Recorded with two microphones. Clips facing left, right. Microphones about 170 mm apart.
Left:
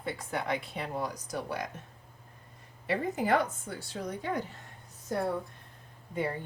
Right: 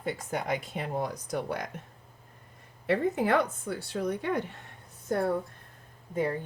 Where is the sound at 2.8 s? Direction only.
60° right (ahead or behind).